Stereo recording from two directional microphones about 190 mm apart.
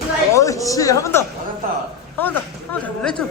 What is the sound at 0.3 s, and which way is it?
Speech, 15° left (ahead or behind).